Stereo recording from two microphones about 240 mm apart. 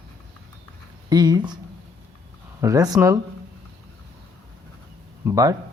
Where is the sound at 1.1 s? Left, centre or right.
Centre.